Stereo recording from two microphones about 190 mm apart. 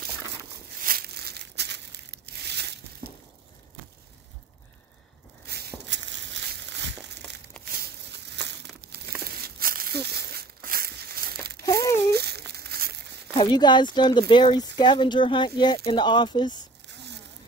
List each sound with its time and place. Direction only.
0.8 s crumpling: 55° right (ahead or behind)
5.5 s a sound: 60° right (ahead or behind)
6.7 s crumpling: 65° right (ahead or behind)
11.6 s crumpling: 15° left (ahead or behind)
12.1 s crumpling: 60° right (ahead or behind)
13.4 s speech: 25° left (ahead or behind)
16.8 s zipper: 65° right (ahead or behind)